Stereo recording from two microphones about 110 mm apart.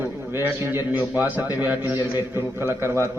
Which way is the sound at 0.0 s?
20° right (ahead or behind).